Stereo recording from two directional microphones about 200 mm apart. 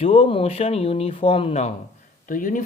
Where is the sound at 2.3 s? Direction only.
40° left (ahead or behind).